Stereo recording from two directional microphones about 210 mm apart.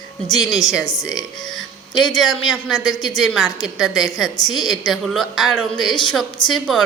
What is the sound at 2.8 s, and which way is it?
Speech, 20° left (ahead or behind).